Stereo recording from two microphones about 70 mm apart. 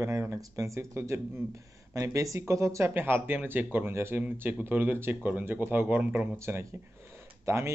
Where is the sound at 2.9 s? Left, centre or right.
Right.